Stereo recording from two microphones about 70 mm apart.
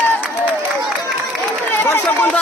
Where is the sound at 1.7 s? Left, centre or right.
Left.